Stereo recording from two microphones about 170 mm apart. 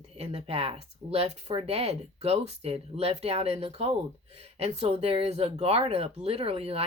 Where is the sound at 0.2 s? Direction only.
35° right (ahead or behind).